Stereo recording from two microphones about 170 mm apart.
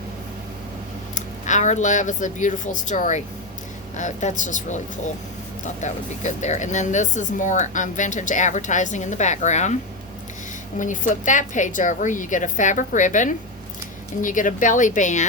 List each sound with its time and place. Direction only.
1.1 s speech: 45° left (ahead or behind)
10.8 s speech: 50° left (ahead or behind)